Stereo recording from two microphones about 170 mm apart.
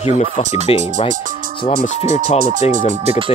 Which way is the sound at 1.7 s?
50° right (ahead or behind).